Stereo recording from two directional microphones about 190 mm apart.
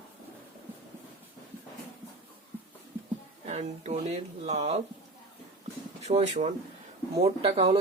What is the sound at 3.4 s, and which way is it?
Speech, 35° right (ahead or behind).